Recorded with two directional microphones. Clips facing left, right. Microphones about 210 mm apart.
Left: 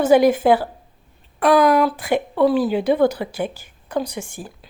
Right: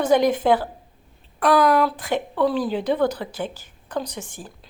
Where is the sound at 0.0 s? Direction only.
5° left (ahead or behind).